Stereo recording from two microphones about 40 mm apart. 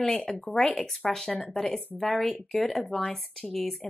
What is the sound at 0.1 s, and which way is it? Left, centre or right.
Speech, left.